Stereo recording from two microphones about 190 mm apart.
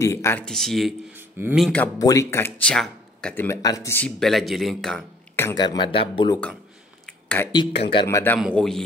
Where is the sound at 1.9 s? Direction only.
15° left (ahead or behind); by 5.0 s centre (ahead or behind).